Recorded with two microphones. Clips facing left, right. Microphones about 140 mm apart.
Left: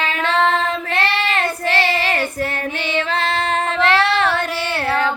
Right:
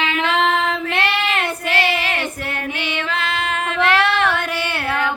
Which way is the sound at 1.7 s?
35° left (ahead or behind).